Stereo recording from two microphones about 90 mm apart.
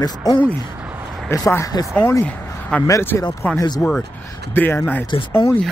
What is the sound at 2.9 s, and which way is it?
Speech, 30° left (ahead or behind).